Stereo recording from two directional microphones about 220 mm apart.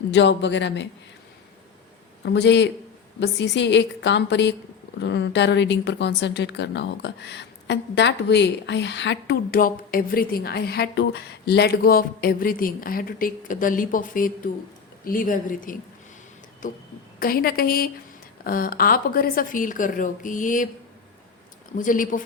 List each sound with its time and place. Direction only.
0.1 s speech: 55° left (ahead or behind)
2.2 s speech: 50° left (ahead or behind)
21.8 s speech: 35° left (ahead or behind)